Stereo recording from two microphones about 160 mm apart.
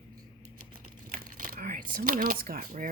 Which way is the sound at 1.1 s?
60° right (ahead or behind).